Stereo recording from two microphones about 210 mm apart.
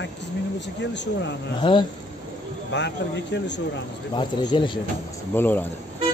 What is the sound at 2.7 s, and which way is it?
Speech, 55° left (ahead or behind).